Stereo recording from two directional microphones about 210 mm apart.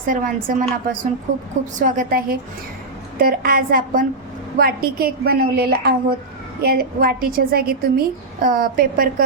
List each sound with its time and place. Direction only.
0.0 s a woman's voice: 40° right (ahead or behind)
1.8 s a woman's voice: 40° right (ahead or behind)